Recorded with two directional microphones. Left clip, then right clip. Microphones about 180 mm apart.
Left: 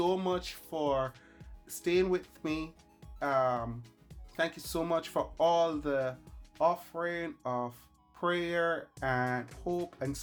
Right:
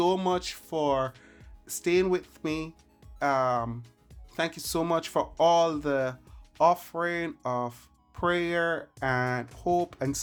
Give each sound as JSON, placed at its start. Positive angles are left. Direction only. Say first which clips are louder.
{"t": 0.0, "sound": "speech", "louder": "right 5 dB", "side_deg": -35}
{"t": 1.2, "sound": "music", "louder": "right 3 dB", "side_deg": -35}
{"t": 2.3, "sound": "speech", "louder": "right 4 dB", "side_deg": -25}